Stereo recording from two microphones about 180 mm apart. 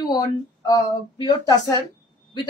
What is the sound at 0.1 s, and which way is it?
Speech, 20° left (ahead or behind).